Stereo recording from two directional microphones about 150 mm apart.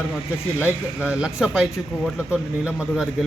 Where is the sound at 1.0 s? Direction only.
5° right (ahead or behind).